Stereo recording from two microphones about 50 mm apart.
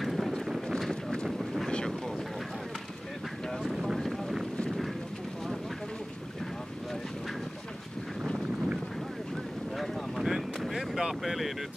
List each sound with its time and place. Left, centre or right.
0.0 s boat: centre
0.7 s a sound: centre
1.2 s boat: centre
1.7 s boat: centre
3.6 s boat: centre
9.8 s wind noise: centre